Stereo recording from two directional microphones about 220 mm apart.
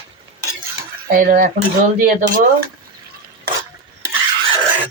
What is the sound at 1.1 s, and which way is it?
Speech, 40° right (ahead or behind).